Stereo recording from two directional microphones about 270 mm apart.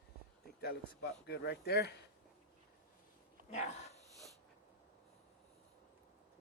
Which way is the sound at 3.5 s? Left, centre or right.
Left.